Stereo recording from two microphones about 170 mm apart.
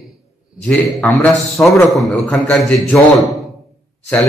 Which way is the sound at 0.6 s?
10° left (ahead or behind).